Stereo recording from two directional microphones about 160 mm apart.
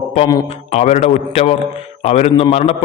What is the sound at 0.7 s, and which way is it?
A man's voice, 45° left (ahead or behind).